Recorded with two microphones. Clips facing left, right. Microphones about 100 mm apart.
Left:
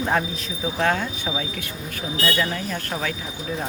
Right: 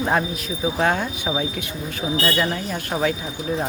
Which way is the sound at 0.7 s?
15° right (ahead or behind).